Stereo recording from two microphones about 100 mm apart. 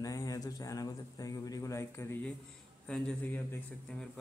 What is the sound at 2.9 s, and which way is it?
A man's voice, 10° left (ahead or behind).